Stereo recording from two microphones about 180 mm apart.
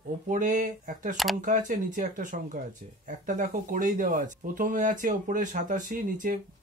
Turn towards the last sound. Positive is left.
turn(degrees=-45)  # may be behind; listen again after turning